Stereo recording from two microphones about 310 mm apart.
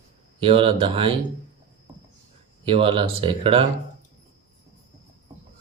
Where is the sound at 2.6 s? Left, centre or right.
Centre.